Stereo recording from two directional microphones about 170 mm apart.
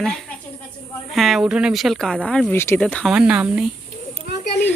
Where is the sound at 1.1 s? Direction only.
Centre (ahead or behind).